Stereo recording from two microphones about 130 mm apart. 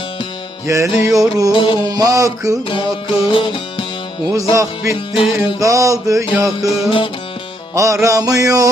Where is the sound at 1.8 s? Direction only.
30° right (ahead or behind).